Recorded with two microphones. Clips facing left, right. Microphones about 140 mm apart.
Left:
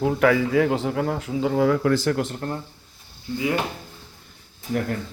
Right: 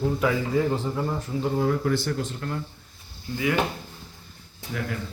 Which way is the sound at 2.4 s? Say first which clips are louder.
Left 2 dB; 35° left (ahead or behind).